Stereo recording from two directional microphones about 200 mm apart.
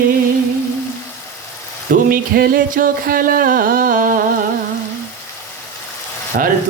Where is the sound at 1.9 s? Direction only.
45° right (ahead or behind).